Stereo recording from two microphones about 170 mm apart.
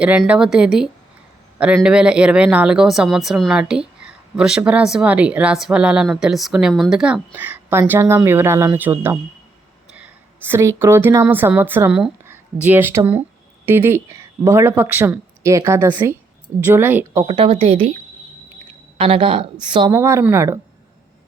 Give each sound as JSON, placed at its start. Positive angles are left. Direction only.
{"t": 0.0, "sound": "a woman's voice", "side_deg": -10}
{"t": 17.2, "sound": "a woman's voice", "side_deg": -30}
{"t": 18.9, "sound": "a woman's voice", "side_deg": -35}
{"t": 19.9, "sound": "speech", "side_deg": -15}